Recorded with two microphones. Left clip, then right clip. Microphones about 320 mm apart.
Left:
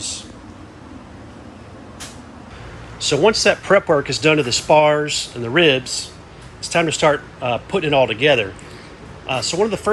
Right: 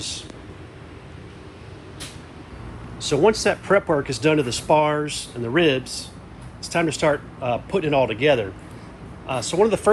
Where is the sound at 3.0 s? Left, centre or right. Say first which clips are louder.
Left 3 dB; centre.